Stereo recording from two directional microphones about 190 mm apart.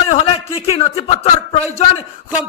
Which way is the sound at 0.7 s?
30° left (ahead or behind).